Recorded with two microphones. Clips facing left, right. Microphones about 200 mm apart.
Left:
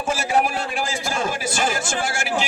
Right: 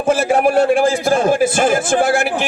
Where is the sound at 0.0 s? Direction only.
55° right (ahead or behind).